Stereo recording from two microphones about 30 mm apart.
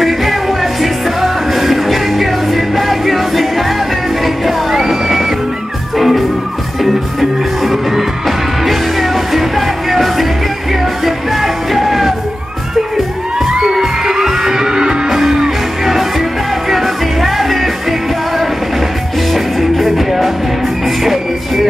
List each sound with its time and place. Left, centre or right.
0.0 s music: centre
13.5 s music: centre
15.0 s music: centre
19.3 s music: centre